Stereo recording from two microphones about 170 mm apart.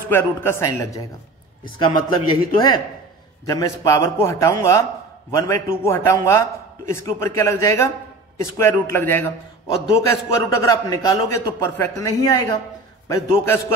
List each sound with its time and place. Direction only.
0.1 s a man's voice: 15° left (ahead or behind)